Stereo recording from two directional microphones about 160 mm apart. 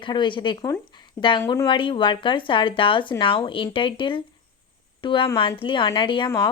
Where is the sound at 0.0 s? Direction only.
30° left (ahead or behind).